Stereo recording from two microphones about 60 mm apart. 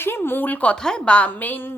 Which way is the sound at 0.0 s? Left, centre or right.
Left.